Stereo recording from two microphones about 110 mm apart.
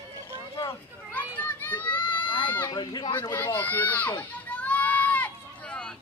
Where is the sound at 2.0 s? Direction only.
45° left (ahead or behind).